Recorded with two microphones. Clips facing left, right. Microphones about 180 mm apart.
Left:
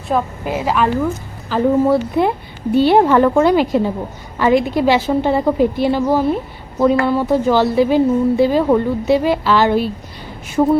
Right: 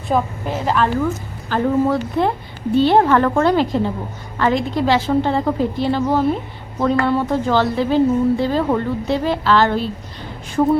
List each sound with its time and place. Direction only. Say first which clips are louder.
0.1 s a woman's voice: left 1 dB; centre (ahead or behind)